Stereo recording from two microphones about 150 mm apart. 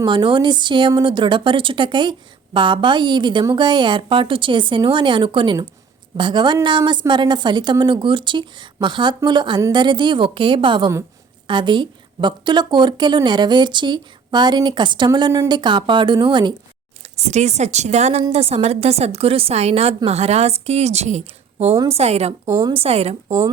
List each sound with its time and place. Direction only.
0.0 s a woman's voice: 30° right (ahead or behind)
17.2 s a woman's voice: 50° right (ahead or behind)
22.4 s a woman's voice: 20° right (ahead or behind)
22.7 s a woman's voice: 40° right (ahead or behind)